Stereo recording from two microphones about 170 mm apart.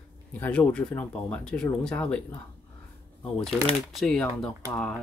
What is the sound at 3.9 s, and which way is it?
Speech, centre (ahead or behind).